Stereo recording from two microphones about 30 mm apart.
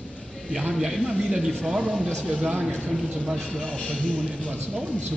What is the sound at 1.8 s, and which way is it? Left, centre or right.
Speech, right.